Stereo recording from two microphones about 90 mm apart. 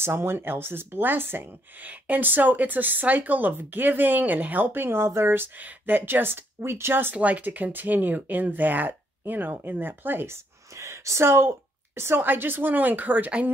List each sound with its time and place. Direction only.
0.0 s speech: 25° right (ahead or behind)